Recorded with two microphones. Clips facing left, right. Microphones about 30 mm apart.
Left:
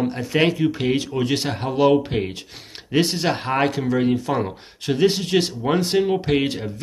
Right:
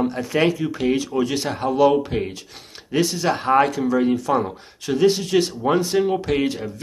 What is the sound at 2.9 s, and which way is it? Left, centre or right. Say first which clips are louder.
Speech: even; left.